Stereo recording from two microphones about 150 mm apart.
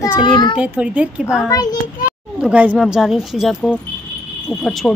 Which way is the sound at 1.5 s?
25° left (ahead or behind).